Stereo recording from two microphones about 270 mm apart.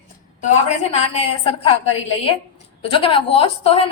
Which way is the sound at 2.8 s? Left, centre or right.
Centre.